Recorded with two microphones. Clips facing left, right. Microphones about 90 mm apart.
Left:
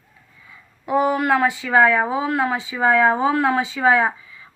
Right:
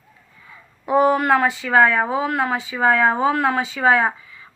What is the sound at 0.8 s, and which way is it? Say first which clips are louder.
Speech: right 3 dB; 35° right (ahead or behind).